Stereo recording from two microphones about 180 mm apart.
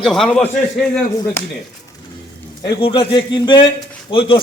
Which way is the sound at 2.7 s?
30° left (ahead or behind).